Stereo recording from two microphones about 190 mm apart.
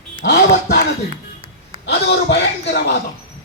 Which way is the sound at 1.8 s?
60° left (ahead or behind).